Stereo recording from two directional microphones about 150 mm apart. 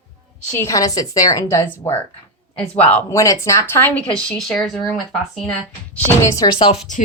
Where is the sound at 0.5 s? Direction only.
20° left (ahead or behind); by 4.8 s centre (ahead or behind).